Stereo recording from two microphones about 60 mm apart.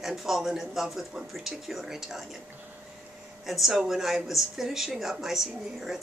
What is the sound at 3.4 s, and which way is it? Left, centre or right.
A woman's voice, centre.